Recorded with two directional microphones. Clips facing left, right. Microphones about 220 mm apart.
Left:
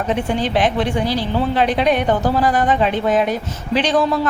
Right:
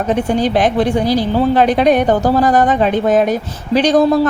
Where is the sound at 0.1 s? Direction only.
40° right (ahead or behind).